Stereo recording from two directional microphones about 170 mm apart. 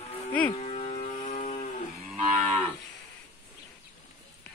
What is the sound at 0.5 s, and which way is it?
Music, 40° left (ahead or behind).